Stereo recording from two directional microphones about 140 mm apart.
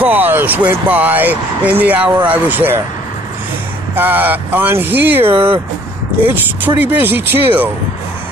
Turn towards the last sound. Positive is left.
turn(degrees=-15)  # may be behind; listen again after turning